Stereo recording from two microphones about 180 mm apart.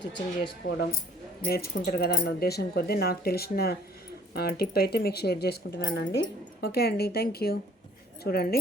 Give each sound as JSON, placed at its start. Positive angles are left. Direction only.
{"t": 0.6, "sound": "speech", "side_deg": 65}
{"t": 6.6, "sound": "speech", "side_deg": 60}